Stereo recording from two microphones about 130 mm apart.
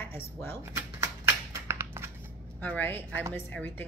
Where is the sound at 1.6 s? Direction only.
20° right (ahead or behind).